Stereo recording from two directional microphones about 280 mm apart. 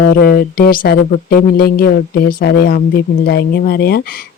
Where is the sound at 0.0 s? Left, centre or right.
Left.